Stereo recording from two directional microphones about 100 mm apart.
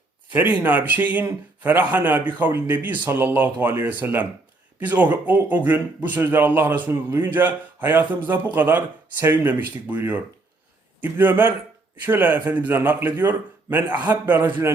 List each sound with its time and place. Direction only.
0.3 s a man's voice: 15° right (ahead or behind)